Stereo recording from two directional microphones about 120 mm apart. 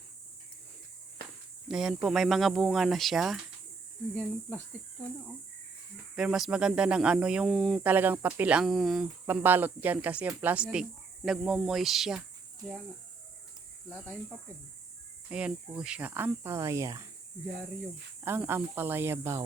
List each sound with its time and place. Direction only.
1.6 s speech: 5° right (ahead or behind)
4.1 s speech: 10° left (ahead or behind)
6.1 s speech: 5° right (ahead or behind)
7.9 s speech: 15° right (ahead or behind)
9.2 s speech: 15° right (ahead or behind)
15.3 s speech: 10° right (ahead or behind)
18.3 s speech: 20° right (ahead or behind)